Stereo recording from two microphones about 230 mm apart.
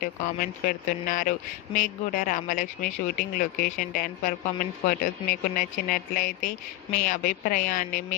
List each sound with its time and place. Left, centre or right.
0.0 s speech: left